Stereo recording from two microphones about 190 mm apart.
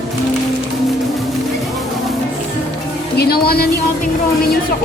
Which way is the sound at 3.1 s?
55° left (ahead or behind).